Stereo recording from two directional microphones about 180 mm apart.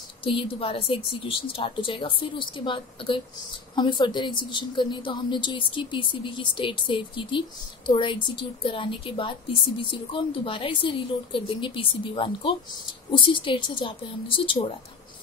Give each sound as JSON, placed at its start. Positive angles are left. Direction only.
{"t": 0.2, "sound": "a woman's voice", "side_deg": 30}